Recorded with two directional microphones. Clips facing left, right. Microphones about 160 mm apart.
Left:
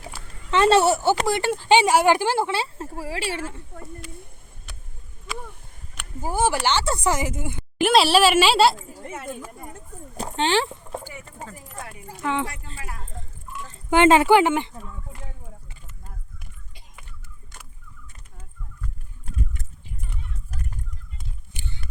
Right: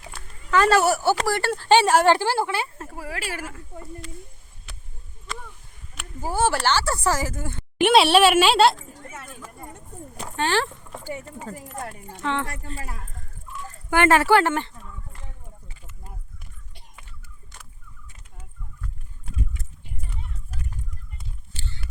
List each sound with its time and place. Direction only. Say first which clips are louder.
0.5 s speech: left 1 dB; 25° left (ahead or behind)
6.2 s speech: even; 15° left (ahead or behind)
7.8 s speech: right 1 dB; centre (ahead or behind)
9.0 s speech: left 8 dB; 25° left (ahead or behind)
10.2 s a sound: left 2 dB; 20° left (ahead or behind)
11.1 s speech: right 6 dB; 40° right (ahead or behind)
12.2 s speech: left 1 dB; 10° left (ahead or behind)
12.5 s speech: right 3 dB; 45° right (ahead or behind)
13.7 s speech: left 3 dB; 20° left (ahead or behind)
21.5 s a sound: left 1 dB; 15° left (ahead or behind)